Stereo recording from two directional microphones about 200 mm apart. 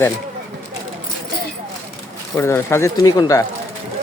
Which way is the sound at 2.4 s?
15° left (ahead or behind).